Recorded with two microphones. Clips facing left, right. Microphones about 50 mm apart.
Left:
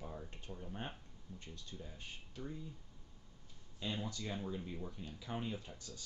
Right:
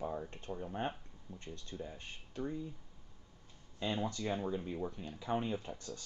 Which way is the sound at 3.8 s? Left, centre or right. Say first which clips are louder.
Right 5 dB; right.